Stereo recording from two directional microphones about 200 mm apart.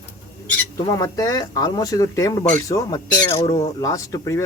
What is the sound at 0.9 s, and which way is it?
Speech, 20° left (ahead or behind).